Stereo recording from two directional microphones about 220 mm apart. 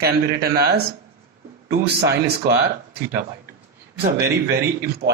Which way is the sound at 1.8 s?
45° right (ahead or behind).